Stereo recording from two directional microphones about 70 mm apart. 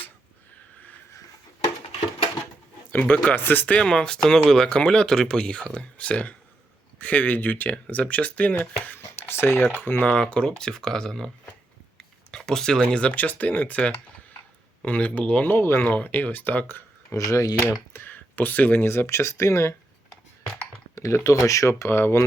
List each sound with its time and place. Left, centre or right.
2.9 s speech: left
3.8 s speech: centre
8.5 s speech: left
10.1 s speech: centre
11.9 s a sound: centre
12.8 s speech: centre
15.4 s speech: left
17.2 s speech: left
17.7 s speech: left
20.9 s speech: left